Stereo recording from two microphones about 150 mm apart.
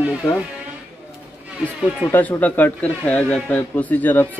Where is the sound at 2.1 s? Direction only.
10° left (ahead or behind).